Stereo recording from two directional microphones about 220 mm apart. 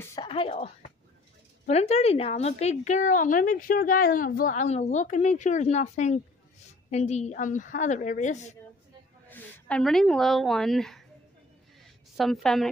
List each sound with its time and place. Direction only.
0.0 s a sound: 20° left (ahead or behind)
1.7 s a woman's voice: 30° left (ahead or behind)
9.3 s speech: 5° left (ahead or behind)
12.2 s a woman's voice: centre (ahead or behind)